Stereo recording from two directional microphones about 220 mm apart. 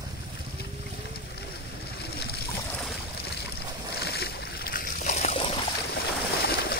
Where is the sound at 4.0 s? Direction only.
45° left (ahead or behind); by 5.6 s 25° left (ahead or behind).